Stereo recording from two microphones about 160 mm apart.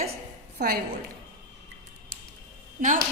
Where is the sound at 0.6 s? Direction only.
70° right (ahead or behind).